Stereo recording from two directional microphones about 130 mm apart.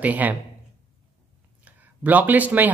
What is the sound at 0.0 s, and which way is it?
Speech, 10° right (ahead or behind).